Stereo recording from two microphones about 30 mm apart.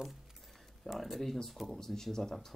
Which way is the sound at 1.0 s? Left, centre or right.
Centre.